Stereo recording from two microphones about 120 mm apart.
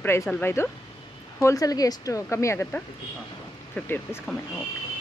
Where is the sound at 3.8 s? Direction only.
10° left (ahead or behind).